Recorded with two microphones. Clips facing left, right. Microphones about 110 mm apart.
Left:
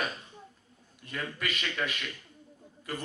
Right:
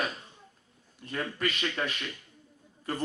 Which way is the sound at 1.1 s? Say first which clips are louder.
Right 3 dB; 30° right (ahead or behind).